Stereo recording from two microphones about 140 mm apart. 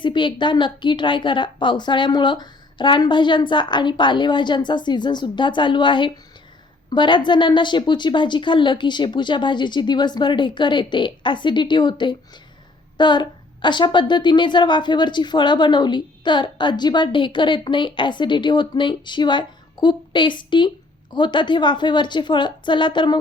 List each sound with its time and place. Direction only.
0.0 s a woman's voice: 35° left (ahead or behind)